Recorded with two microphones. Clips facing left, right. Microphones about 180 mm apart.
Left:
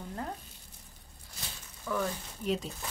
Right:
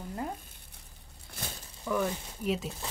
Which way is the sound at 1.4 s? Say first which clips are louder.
Right 5 dB; 55° right (ahead or behind).